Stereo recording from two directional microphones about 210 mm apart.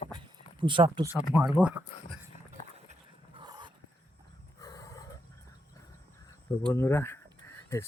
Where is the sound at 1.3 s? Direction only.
10° right (ahead or behind).